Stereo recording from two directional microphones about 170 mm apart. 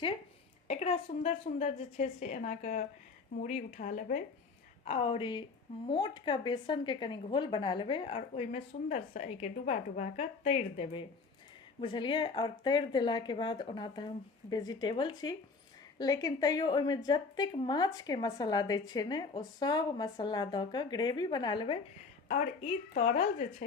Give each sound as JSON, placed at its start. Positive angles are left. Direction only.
{"t": 0.7, "sound": "a woman's voice", "side_deg": 40}
{"t": 4.9, "sound": "speech", "side_deg": 35}
{"t": 22.3, "sound": "a woman's voice", "side_deg": 45}